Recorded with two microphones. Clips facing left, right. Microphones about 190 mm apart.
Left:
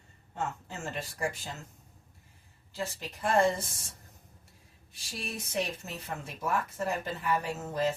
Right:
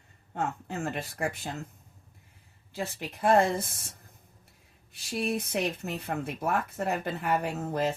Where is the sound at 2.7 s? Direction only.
55° right (ahead or behind).